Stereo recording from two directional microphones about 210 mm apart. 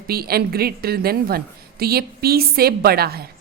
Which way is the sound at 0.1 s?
45° right (ahead or behind).